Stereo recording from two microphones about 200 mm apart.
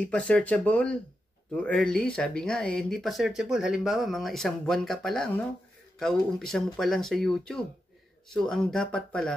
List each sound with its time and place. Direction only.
0.0 s speech: 5° left (ahead or behind)